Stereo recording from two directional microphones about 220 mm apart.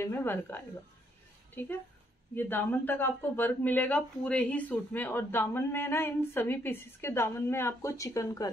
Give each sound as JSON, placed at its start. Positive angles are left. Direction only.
{"t": 0.0, "sound": "a woman's voice", "side_deg": 10}